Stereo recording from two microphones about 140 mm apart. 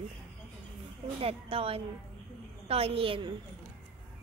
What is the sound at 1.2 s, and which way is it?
A woman's voice, 40° right (ahead or behind).